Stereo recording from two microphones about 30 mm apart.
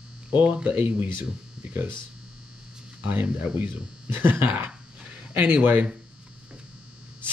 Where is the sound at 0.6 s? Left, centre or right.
Right.